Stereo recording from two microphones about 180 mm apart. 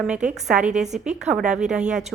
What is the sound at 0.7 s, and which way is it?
Speech, 40° right (ahead or behind).